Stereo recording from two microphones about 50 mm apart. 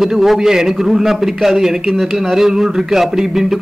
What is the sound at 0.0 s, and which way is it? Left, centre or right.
A man's voice, centre.